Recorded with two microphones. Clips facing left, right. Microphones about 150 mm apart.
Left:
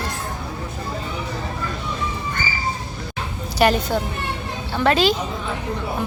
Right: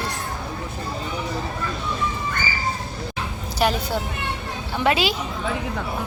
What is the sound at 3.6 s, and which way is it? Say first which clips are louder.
Speech: left 4 dB; centre (ahead or behind).